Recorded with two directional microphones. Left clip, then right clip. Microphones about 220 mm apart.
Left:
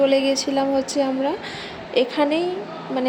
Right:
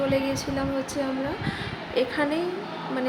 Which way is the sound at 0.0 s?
25° left (ahead or behind).